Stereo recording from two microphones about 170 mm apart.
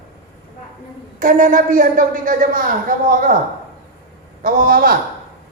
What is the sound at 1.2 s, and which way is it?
A woman's voice, 50° right (ahead or behind).